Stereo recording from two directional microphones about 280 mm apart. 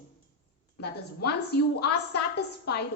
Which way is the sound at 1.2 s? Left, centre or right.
Left.